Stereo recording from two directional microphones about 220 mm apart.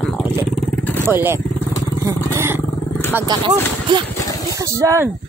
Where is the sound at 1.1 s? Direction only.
10° right (ahead or behind).